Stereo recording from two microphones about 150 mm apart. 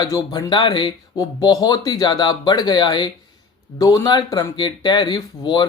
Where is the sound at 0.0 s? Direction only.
25° left (ahead or behind).